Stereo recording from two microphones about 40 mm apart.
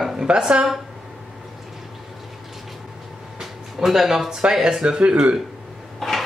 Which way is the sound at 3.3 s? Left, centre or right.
Centre.